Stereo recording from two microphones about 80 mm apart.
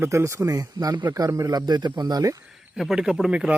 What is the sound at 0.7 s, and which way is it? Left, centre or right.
Speech, right.